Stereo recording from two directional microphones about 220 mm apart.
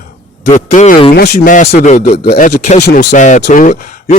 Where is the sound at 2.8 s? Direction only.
50° left (ahead or behind).